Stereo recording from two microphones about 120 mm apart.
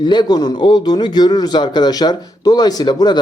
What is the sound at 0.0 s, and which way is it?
A man's voice, 40° left (ahead or behind).